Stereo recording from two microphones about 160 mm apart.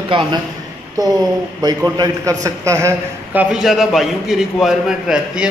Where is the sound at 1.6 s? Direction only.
25° right (ahead or behind).